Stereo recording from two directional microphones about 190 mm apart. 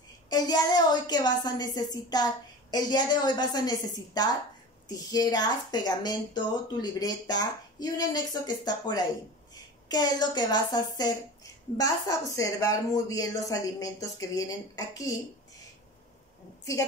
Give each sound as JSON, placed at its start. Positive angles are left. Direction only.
{"t": 0.3, "sound": "a woman's voice", "side_deg": 20}